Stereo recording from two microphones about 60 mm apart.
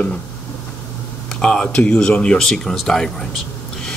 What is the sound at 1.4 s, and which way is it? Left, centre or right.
A man's voice, centre.